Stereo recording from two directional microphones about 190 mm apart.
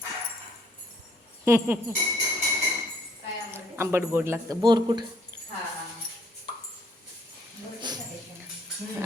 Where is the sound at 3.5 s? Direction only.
15° right (ahead or behind).